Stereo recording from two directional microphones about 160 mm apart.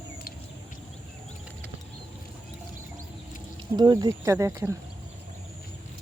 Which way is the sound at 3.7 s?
25° right (ahead or behind).